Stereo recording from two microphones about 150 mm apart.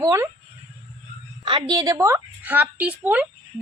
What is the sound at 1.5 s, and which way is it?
A woman's voice, 30° right (ahead or behind).